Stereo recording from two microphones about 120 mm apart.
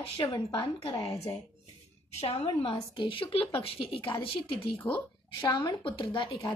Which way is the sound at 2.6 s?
45° left (ahead or behind).